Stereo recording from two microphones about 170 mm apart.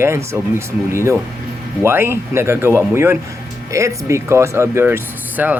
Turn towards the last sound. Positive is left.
turn(degrees=-10)  # may be behind; listen again after turning